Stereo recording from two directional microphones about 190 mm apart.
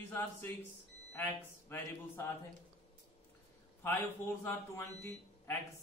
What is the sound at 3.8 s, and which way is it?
A woman's voice, 10° left (ahead or behind).